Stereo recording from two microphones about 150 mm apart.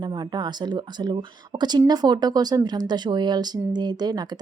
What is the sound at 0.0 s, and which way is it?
A woman's voice, 30° right (ahead or behind).